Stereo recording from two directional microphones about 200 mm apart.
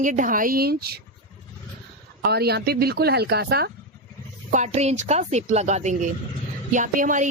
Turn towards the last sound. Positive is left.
turn(degrees=-40)  # may be behind; listen again after turning